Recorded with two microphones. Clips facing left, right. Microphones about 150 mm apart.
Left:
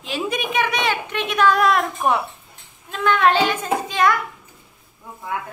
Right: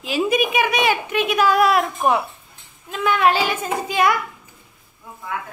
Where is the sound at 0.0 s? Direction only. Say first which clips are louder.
Right 5 dB; 5° right (ahead or behind).